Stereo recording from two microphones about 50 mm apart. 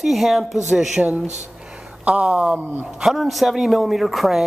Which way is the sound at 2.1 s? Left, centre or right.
Right.